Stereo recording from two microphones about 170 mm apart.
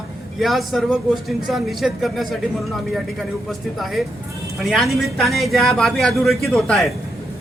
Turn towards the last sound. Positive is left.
turn(degrees=0)  # may be behind; listen again after turning